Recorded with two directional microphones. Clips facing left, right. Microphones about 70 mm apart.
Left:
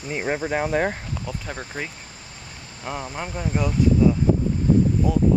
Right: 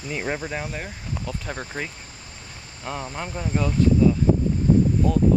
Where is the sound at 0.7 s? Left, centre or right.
Left.